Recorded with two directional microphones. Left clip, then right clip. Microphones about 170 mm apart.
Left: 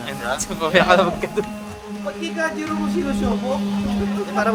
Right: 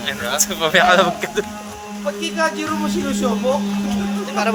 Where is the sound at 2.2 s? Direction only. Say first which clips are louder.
Right 4 dB; 25° right (ahead or behind).